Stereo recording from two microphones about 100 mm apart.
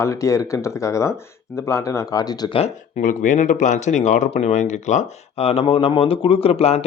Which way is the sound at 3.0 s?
90° left.